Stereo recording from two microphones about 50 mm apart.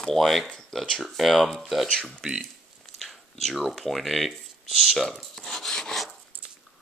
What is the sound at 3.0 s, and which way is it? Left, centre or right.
Speech, centre.